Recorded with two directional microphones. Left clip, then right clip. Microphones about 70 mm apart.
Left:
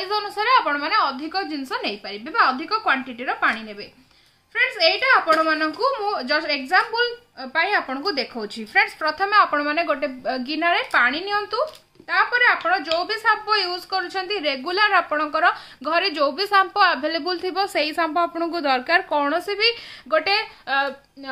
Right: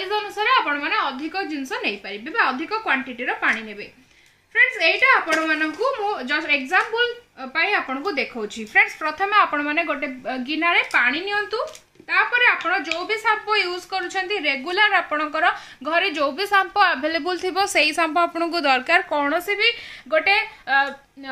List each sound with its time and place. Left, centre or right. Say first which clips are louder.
0.1 s a woman's voice: left 1 dB; left
4.6 s a woman's voice: right 2 dB; left; by 10.1 s centre
10.2 s a woman's voice: right 1 dB; left
15.0 s a woman's voice: left 1 dB; centre
15.8 s a woman's voice: even; centre
18.3 s a woman's voice: right 2 dB; centre
19.4 s a woman's voice: right 1 dB; centre